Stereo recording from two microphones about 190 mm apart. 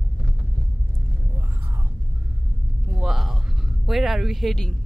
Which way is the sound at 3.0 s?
Centre (ahead or behind).